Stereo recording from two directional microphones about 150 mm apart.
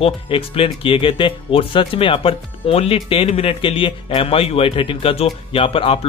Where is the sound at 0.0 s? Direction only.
35° left (ahead or behind).